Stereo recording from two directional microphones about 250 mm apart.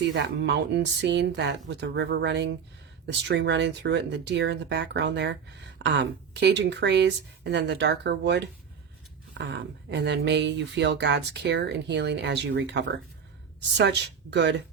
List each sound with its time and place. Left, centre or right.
0.0 s speech: right